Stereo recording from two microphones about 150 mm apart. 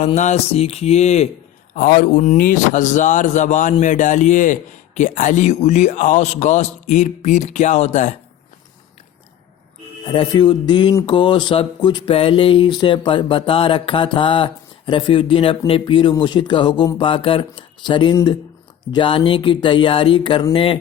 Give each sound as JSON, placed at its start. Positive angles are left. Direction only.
{"t": 0.0, "sound": "a man's voice", "side_deg": 50}
{"t": 1.7, "sound": "speech", "side_deg": 75}
{"t": 2.4, "sound": "a man's voice", "side_deg": 60}
{"t": 10.1, "sound": "speech", "side_deg": 35}